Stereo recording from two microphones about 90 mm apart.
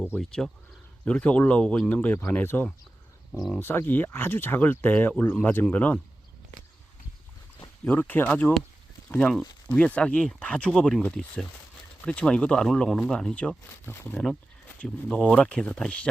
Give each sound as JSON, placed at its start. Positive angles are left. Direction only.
{"t": 0.2, "sound": "speech", "side_deg": 5}
{"t": 3.3, "sound": "speech", "side_deg": 5}
{"t": 3.6, "sound": "speech", "side_deg": 25}
{"t": 7.9, "sound": "speech", "side_deg": 20}
{"t": 13.8, "sound": "speech", "side_deg": 25}
{"t": 14.8, "sound": "speech", "side_deg": 10}